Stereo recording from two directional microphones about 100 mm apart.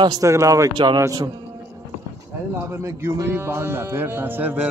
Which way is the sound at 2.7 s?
25° right (ahead or behind).